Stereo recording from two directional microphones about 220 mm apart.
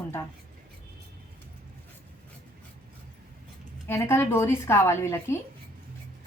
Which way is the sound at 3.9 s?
10° left (ahead or behind).